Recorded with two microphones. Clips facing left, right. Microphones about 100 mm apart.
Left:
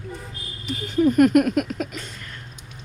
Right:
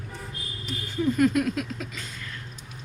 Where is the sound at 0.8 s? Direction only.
70° left (ahead or behind).